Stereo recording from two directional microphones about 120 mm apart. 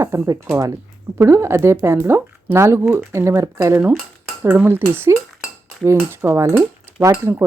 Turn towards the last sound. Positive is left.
turn(degrees=-25)  # may be behind; listen again after turning